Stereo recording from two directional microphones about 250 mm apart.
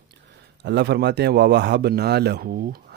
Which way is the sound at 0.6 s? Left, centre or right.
Right.